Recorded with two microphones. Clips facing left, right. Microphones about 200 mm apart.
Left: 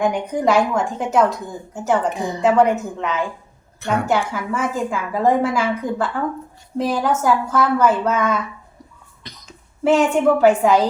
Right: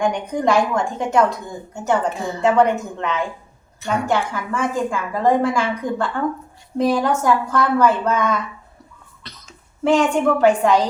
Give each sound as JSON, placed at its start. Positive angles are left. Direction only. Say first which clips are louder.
{"t": 0.0, "sound": "a woman's voice", "louder": "left 1 dB", "side_deg": 5}
{"t": 2.0, "sound": "a woman's voice", "louder": "left 1 dB", "side_deg": 15}
{"t": 2.4, "sound": "a woman's voice", "louder": "left 1 dB", "side_deg": 5}